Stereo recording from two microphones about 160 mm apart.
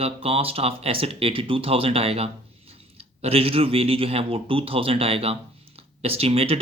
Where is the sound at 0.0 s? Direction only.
35° right (ahead or behind).